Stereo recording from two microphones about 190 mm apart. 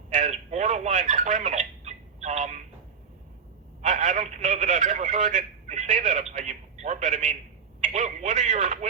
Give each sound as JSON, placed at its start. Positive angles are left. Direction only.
{"t": 0.1, "sound": "telephone", "side_deg": -40}
{"t": 3.8, "sound": "telephone", "side_deg": -40}